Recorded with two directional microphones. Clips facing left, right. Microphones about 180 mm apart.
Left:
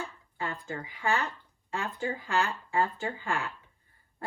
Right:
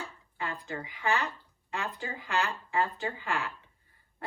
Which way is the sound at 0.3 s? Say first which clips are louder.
Left 1 dB; 30° left (ahead or behind).